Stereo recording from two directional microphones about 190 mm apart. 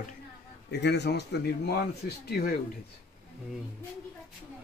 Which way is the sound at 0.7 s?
60° left (ahead or behind).